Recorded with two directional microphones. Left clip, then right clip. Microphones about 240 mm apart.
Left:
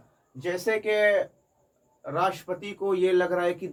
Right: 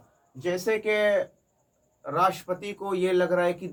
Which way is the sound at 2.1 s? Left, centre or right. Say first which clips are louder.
Right 2 dB; centre.